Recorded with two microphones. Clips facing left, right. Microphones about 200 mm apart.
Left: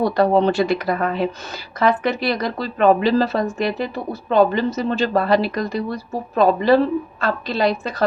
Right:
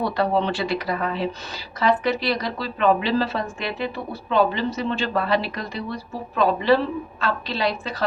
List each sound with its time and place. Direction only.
0.0 s a woman's voice: 45° left (ahead or behind)